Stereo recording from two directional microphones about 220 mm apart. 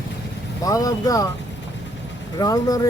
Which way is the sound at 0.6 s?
15° left (ahead or behind).